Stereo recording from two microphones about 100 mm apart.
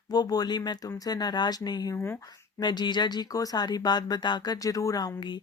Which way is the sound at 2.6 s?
45° left (ahead or behind).